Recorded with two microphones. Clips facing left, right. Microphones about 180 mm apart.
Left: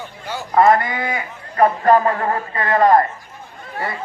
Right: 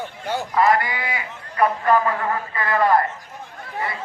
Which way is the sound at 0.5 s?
45° left (ahead or behind).